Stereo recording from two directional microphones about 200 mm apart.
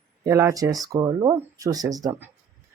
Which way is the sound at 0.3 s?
15° right (ahead or behind).